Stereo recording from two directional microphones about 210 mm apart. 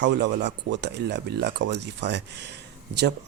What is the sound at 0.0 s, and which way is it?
Speech, 55° right (ahead or behind).